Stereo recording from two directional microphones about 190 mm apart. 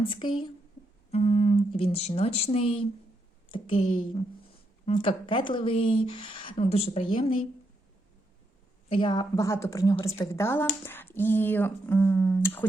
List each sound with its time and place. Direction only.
0.0 s speech: 25° left (ahead or behind)
8.9 s speech: 25° left (ahead or behind); by 12.6 s 10° left (ahead or behind)